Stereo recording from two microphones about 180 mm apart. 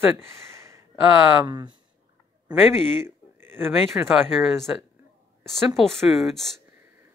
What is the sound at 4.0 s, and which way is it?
Speech, 10° right (ahead or behind).